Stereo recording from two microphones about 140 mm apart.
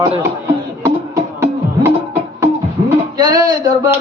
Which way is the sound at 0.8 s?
20° right (ahead or behind).